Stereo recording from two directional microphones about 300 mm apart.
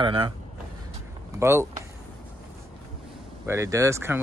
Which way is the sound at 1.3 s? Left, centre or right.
Centre.